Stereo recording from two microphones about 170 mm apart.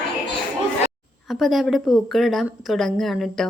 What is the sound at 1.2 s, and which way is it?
A woman's voice, centre (ahead or behind).